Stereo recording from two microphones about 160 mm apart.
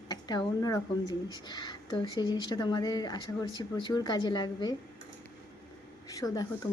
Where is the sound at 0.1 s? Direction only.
25° left (ahead or behind).